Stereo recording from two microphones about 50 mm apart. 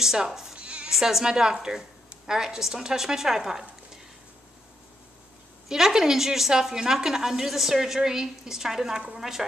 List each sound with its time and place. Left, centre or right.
0.0 s speech: centre
0.6 s bleat: right
0.9 s a woman's voice: centre
5.7 s a woman's voice: centre